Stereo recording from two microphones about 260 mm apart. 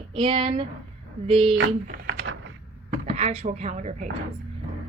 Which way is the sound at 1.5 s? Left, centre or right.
Right.